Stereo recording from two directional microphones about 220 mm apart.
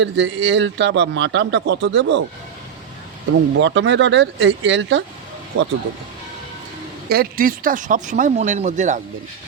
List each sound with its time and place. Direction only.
0.0 s a man's voice: 55° right (ahead or behind)
3.6 s speech: 55° right (ahead or behind)
7.1 s speech: 40° right (ahead or behind)